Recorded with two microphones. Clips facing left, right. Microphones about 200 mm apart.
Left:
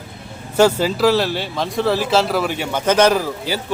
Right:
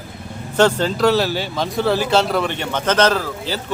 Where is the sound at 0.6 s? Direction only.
5° left (ahead or behind).